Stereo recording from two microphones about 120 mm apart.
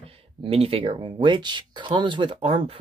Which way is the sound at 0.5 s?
55° right (ahead or behind).